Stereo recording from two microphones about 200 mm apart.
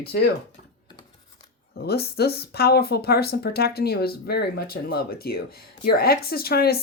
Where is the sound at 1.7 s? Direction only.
50° left (ahead or behind).